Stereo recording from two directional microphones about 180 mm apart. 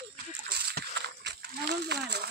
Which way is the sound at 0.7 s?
75° right (ahead or behind).